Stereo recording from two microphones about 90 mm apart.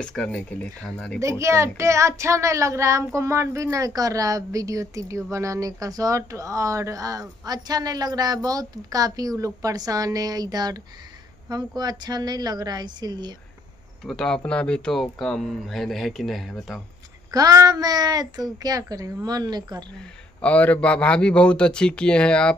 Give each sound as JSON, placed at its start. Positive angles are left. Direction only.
{"t": 0.0, "sound": "a man's voice", "side_deg": 10}
{"t": 1.4, "sound": "child singing", "side_deg": -30}
{"t": 11.4, "sound": "speech", "side_deg": -50}
{"t": 14.0, "sound": "speech", "side_deg": 5}
{"t": 17.3, "sound": "speech", "side_deg": -45}
{"t": 20.4, "sound": "a man's voice", "side_deg": 15}